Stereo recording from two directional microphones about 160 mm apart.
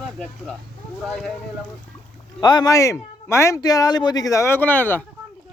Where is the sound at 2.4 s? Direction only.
25° left (ahead or behind).